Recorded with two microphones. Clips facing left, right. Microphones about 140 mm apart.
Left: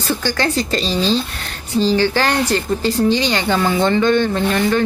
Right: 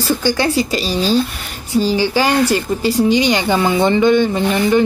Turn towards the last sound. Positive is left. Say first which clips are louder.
# right 2 dB
turn(degrees=-15)  # may be behind; listen again after turning